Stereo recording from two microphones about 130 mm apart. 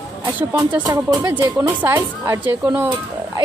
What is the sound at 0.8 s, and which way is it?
Speech, 25° right (ahead or behind).